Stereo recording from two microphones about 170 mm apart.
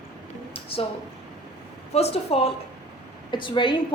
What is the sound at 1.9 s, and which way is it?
A woman's voice, 40° left (ahead or behind).